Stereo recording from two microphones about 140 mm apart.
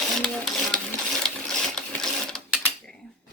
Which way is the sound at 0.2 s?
5° left (ahead or behind).